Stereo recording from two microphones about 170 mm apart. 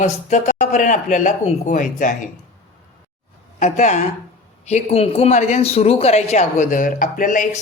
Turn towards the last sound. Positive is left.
turn(degrees=50)  # may be behind; listen again after turning